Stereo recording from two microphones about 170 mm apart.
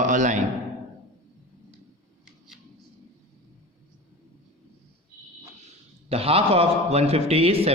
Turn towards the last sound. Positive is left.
turn(degrees=-35)  # may be behind; listen again after turning